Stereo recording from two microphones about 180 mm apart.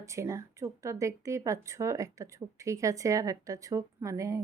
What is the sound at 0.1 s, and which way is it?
Speech, 15° right (ahead or behind).